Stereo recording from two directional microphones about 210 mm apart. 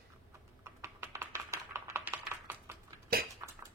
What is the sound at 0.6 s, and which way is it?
Computer keyboard, 15° right (ahead or behind).